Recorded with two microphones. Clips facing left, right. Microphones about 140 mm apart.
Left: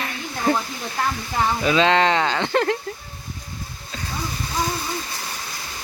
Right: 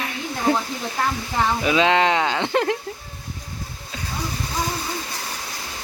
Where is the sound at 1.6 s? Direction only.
15° right (ahead or behind).